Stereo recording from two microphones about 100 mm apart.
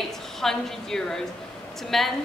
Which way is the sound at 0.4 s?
5° left (ahead or behind).